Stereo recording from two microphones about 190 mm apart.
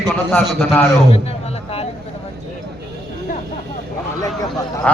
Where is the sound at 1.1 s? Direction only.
35° left (ahead or behind).